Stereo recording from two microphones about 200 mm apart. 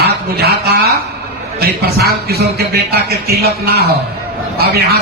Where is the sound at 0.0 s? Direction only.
55° right (ahead or behind).